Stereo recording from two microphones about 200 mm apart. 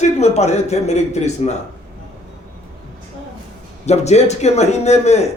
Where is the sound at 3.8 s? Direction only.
35° left (ahead or behind).